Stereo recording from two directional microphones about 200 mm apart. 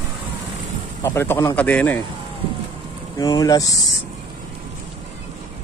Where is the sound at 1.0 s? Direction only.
10° left (ahead or behind).